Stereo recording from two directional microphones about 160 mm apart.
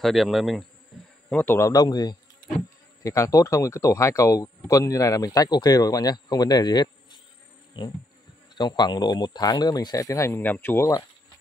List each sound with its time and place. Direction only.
0.0 s bee: centre (ahead or behind)
1.3 s speech: 15° left (ahead or behind)